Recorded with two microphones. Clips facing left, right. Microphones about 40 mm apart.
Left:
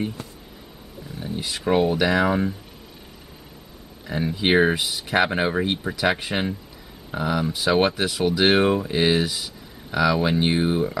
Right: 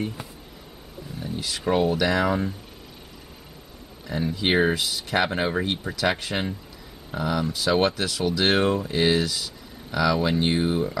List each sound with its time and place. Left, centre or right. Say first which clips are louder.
1.2 s speech: left 1 dB; centre
4.1 s speech: left 3 dB; centre